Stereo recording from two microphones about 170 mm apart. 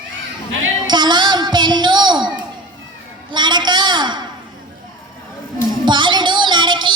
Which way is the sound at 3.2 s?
25° right (ahead or behind).